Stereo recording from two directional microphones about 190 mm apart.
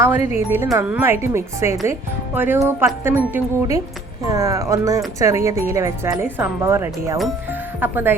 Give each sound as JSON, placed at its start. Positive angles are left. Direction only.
{"t": 0.3, "sound": "speech", "side_deg": -15}